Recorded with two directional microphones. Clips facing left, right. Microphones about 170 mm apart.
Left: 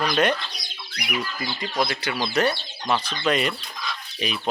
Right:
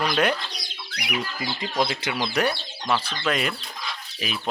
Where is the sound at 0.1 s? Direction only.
5° right (ahead or behind).